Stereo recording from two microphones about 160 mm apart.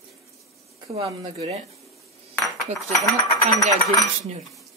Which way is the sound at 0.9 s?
35° right (ahead or behind).